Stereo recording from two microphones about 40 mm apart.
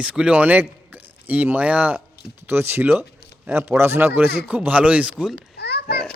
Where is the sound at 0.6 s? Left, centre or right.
Right.